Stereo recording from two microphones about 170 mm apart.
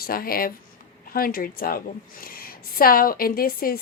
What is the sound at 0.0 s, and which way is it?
A woman's voice, 60° left (ahead or behind).